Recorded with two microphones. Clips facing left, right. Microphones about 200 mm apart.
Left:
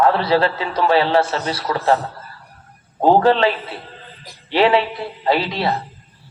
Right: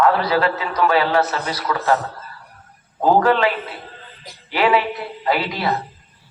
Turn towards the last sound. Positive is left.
turn(degrees=30)  # may be behind; listen again after turning